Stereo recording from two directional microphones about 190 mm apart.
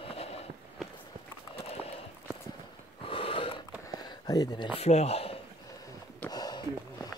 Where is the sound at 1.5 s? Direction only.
30° left (ahead or behind).